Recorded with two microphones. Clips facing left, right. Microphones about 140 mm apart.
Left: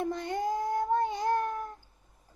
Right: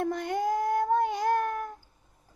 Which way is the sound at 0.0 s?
90° right.